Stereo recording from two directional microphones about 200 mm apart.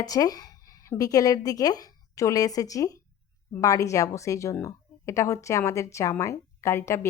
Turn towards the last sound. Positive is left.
turn(degrees=15)  # may be behind; listen again after turning